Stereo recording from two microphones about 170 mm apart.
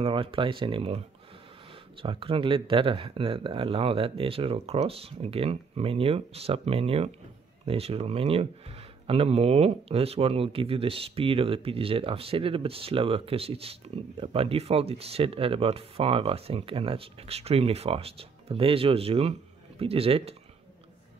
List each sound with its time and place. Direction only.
0.0 s speech: 30° right (ahead or behind)